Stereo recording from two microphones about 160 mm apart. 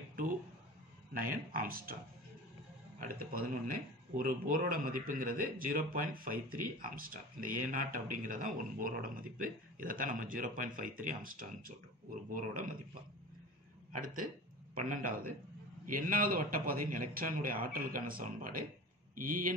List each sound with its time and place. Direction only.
1.1 s a man's voice: 60° right (ahead or behind)
3.0 s a man's voice: 65° right (ahead or behind)
13.9 s a man's voice: 55° right (ahead or behind)